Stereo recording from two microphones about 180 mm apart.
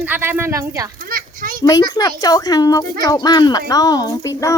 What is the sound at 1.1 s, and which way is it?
Children playing, 50° right (ahead or behind).